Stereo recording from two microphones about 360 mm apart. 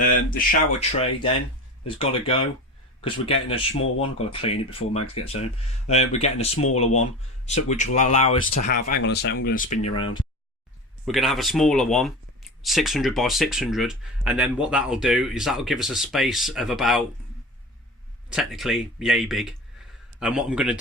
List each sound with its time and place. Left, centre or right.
0.3 s speech: centre
8.6 s speech: left
9.8 s speech: centre
11.0 s speech: centre
18.3 s speech: centre